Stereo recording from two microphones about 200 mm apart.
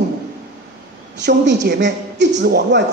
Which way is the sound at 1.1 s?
60° right (ahead or behind).